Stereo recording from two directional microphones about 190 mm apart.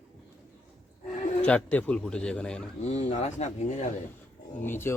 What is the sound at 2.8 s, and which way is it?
Speech, 35° left (ahead or behind).